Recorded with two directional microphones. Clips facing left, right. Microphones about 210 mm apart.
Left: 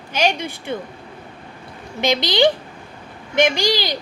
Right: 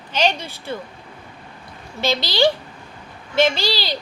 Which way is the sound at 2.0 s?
15° left (ahead or behind).